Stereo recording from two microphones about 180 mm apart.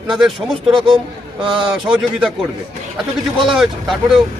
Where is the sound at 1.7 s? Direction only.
5° right (ahead or behind).